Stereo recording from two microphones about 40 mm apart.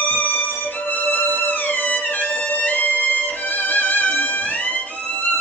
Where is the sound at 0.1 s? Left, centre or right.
Left.